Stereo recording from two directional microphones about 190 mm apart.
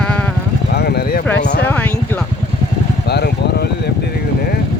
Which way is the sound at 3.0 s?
60° left (ahead or behind).